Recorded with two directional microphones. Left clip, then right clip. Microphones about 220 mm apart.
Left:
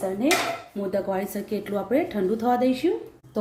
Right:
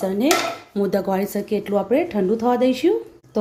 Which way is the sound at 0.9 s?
40° right (ahead or behind).